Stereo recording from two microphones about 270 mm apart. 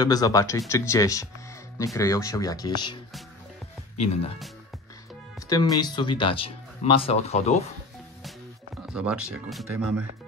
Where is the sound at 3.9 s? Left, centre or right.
Left.